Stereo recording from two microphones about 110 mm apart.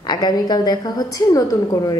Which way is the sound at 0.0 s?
40° left (ahead or behind).